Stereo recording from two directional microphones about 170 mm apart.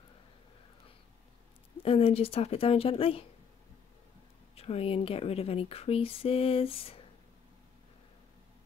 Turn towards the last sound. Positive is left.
turn(degrees=35)  # may be behind; listen again after turning